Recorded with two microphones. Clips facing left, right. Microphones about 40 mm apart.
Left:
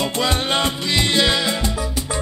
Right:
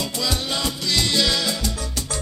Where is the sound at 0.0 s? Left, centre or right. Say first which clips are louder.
Left 5 dB; left.